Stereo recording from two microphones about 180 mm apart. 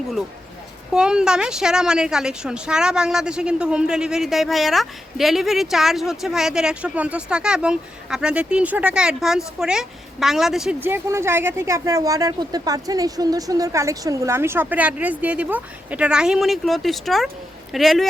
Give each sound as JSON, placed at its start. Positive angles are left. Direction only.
{"t": 0.9, "sound": "a woman's voice", "side_deg": -5}
{"t": 10.8, "sound": "a woman's voice", "side_deg": -15}